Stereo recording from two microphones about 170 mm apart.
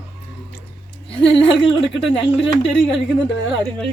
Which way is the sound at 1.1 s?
30° left (ahead or behind).